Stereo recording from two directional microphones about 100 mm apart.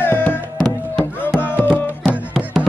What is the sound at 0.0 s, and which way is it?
Music, 20° left (ahead or behind).